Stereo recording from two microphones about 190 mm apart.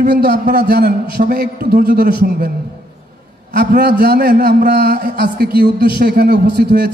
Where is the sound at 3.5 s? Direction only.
55° right (ahead or behind).